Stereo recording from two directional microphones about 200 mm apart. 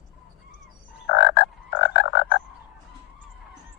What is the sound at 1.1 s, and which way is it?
Frog, 55° left (ahead or behind).